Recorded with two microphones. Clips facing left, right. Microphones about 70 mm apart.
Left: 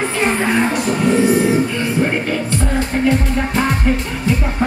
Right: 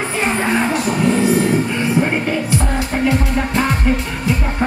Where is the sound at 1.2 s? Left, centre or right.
Centre.